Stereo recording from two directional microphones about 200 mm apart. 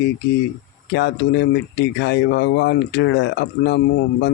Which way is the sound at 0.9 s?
60° left (ahead or behind).